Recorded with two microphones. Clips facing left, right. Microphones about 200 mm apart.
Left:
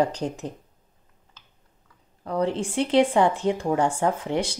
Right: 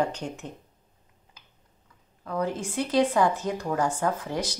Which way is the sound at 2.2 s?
30° left (ahead or behind).